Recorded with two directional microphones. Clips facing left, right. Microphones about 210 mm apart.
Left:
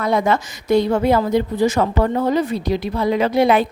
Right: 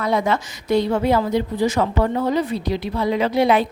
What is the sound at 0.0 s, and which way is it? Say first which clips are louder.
A woman's voice: left 2 dB; 50° left (ahead or behind).